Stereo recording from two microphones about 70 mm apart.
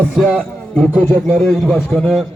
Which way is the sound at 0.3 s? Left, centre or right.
Centre.